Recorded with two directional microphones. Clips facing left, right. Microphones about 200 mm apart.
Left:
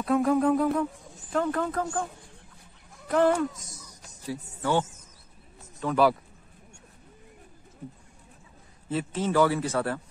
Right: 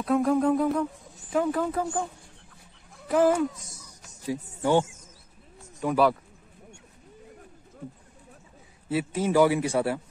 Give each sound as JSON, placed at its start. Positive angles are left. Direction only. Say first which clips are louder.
{"t": 0.0, "sound": "music", "louder": "even", "side_deg": 0}
{"t": 1.3, "sound": "a man's voice", "louder": "right 2 dB", "side_deg": -10}
{"t": 3.1, "sound": "music", "louder": "right 1 dB", "side_deg": -5}
{"t": 4.3, "sound": "a man's voice", "louder": "right 4 dB", "side_deg": -15}
{"t": 8.8, "sound": "a man's voice", "louder": "right 2 dB", "side_deg": -10}